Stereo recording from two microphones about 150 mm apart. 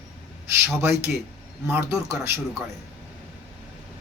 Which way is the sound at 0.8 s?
15° right (ahead or behind).